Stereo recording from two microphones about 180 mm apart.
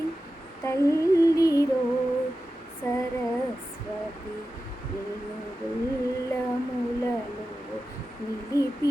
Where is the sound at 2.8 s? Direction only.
15° left (ahead or behind).